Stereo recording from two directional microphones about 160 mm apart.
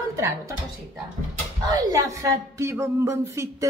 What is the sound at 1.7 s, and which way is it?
A woman's voice, 20° right (ahead or behind).